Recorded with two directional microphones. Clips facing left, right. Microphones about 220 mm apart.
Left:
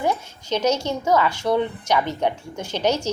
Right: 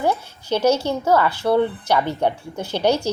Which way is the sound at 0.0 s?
10° right (ahead or behind).